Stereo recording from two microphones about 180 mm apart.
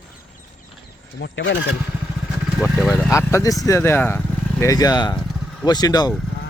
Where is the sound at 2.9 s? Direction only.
15° left (ahead or behind).